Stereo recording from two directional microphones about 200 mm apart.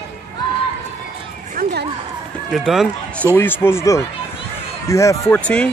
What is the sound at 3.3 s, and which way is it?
Speech, 10° left (ahead or behind).